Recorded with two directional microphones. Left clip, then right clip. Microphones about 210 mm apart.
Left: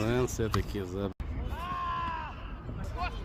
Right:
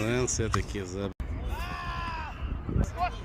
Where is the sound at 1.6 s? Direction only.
50° right (ahead or behind).